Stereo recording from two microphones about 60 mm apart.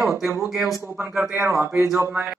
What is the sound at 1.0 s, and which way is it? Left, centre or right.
Speech, right.